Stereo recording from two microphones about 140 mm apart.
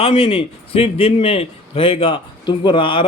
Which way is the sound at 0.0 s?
40° left (ahead or behind).